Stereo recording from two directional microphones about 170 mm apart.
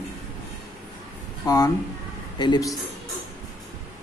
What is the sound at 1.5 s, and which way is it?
Speech, 20° left (ahead or behind).